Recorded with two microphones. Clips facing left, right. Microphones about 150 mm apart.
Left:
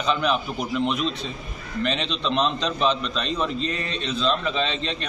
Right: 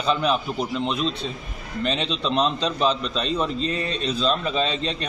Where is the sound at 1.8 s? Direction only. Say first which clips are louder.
Right 1 dB; 35° right (ahead or behind).